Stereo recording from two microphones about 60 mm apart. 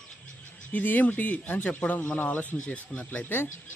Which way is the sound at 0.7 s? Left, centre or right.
Left.